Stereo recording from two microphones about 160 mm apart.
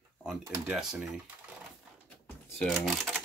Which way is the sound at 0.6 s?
5° right (ahead or behind).